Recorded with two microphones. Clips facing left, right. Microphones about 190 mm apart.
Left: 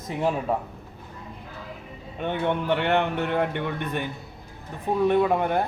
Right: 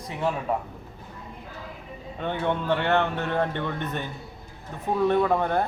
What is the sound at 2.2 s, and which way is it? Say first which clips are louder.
A man's voice: left 1 dB; 15° left (ahead or behind).